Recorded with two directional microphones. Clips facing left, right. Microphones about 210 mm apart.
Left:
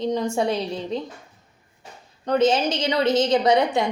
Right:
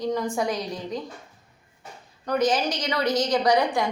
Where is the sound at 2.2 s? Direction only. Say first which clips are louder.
Left 4 dB; 25° left (ahead or behind).